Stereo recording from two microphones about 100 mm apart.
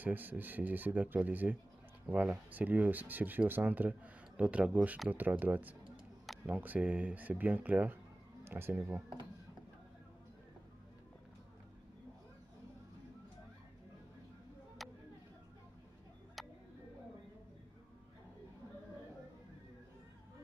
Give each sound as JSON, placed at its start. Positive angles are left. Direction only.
{"t": 0.0, "sound": "speech", "side_deg": -20}
{"t": 5.1, "sound": "speech", "side_deg": -20}
{"t": 14.8, "sound": "a sound", "side_deg": 0}
{"t": 16.4, "sound": "tick-tock", "side_deg": 0}